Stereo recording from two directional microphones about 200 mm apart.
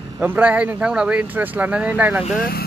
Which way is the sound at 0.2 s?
10° right (ahead or behind).